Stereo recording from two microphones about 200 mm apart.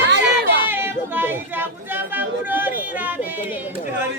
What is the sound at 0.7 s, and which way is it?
Speech, 10° right (ahead or behind).